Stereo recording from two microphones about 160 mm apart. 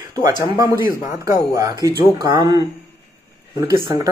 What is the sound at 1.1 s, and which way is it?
A man's voice, 20° right (ahead or behind).